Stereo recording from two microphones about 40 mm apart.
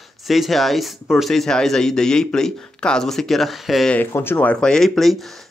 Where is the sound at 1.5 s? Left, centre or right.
Centre.